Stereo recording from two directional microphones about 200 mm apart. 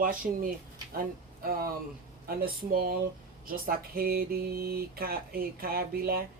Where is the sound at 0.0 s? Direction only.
45° right (ahead or behind).